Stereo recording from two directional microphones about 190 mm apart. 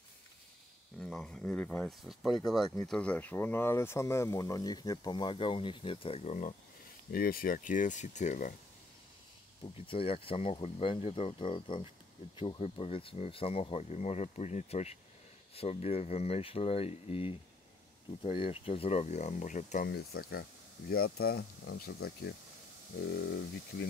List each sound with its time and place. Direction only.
0.9 s speech: centre (ahead or behind); by 6.5 s 35° left (ahead or behind)
7.1 s speech: 50° left (ahead or behind)
9.6 s speech: 30° left (ahead or behind)
19.9 s speech: 55° left (ahead or behind)